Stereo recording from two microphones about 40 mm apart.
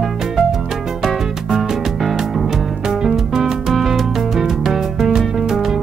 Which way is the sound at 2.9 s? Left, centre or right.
Centre.